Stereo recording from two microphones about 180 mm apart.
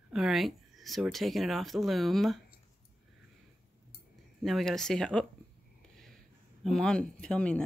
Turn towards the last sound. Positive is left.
turn(degrees=5)  # may be behind; listen again after turning